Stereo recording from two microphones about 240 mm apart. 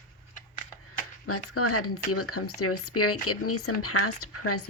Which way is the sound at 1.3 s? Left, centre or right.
Left.